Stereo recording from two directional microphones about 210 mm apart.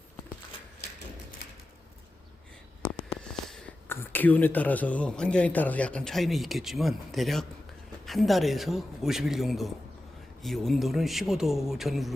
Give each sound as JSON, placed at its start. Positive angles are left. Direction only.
{"t": 3.2, "sound": "a man's voice", "side_deg": 5}